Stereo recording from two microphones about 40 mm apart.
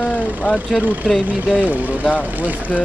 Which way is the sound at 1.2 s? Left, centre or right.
Right.